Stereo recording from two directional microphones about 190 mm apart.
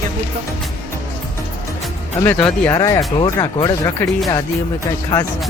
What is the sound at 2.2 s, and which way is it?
Speech, 10° left (ahead or behind).